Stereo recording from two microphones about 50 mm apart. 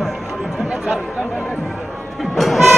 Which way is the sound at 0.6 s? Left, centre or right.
Centre.